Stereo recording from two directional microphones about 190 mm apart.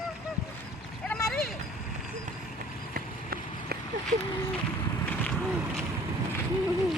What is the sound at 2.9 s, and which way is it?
Run, 50° right (ahead or behind).